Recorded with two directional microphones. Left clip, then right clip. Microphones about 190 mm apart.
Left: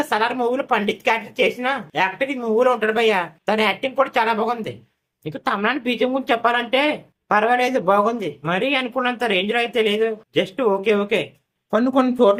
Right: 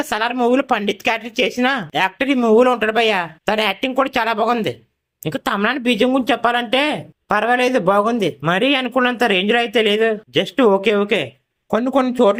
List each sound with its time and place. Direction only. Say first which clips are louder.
0.0 s speech: right 1 dB; 40° right (ahead or behind)